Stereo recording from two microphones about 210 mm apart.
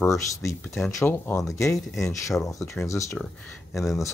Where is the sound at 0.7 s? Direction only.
Centre (ahead or behind).